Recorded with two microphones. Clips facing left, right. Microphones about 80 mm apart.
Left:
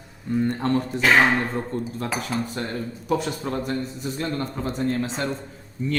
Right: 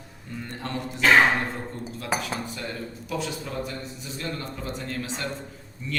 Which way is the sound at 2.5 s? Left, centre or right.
Left.